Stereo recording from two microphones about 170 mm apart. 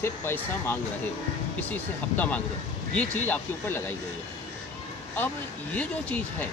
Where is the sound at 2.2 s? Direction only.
10° left (ahead or behind).